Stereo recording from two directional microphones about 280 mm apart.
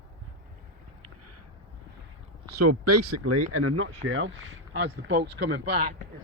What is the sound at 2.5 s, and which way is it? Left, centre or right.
Speech, right.